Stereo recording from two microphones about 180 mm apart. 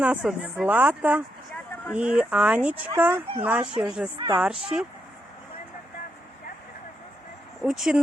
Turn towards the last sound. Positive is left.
turn(degrees=0)  # may be behind; listen again after turning